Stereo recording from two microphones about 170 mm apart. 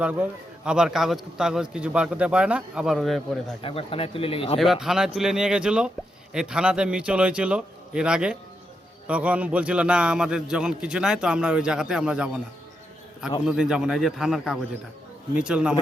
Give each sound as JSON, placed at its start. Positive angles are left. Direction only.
{"t": 0.0, "sound": "a man's voice", "side_deg": -5}
{"t": 3.6, "sound": "speech", "side_deg": 30}
{"t": 4.5, "sound": "a man's voice", "side_deg": 0}
{"t": 13.4, "sound": "a man's voice", "side_deg": -5}